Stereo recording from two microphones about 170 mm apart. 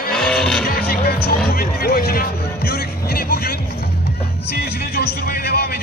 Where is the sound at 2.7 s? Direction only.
65° left (ahead or behind).